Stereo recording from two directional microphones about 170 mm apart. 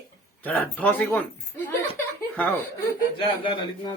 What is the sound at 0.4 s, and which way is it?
Speech, 10° left (ahead or behind).